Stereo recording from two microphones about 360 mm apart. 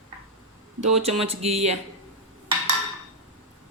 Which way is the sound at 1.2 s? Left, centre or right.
Centre.